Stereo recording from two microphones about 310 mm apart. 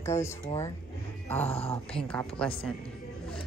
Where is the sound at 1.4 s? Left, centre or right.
Centre.